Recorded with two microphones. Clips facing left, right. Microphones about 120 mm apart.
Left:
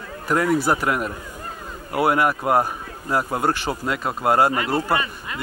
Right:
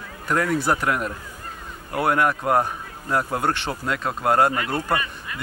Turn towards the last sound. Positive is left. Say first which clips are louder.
# left 3 dB
turn(degrees=25)  # may be behind; listen again after turning